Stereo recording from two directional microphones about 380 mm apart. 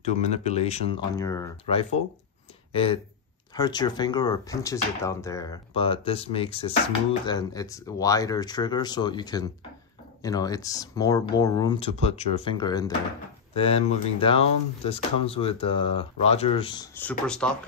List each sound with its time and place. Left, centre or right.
0.0 s speech: centre